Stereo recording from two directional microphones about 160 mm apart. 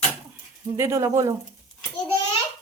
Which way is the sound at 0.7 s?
15° right (ahead or behind).